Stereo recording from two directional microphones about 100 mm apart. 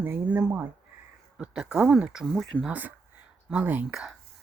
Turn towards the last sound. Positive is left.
turn(degrees=-5)  # may be behind; listen again after turning